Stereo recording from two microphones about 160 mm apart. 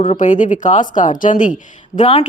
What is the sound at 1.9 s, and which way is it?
Speech, 35° left (ahead or behind).